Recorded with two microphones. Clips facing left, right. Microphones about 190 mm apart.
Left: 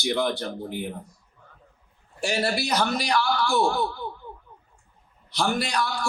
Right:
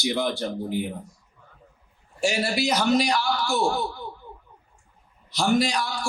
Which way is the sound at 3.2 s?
55° left (ahead or behind).